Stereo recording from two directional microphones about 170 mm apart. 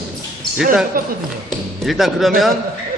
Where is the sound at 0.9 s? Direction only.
55° right (ahead or behind).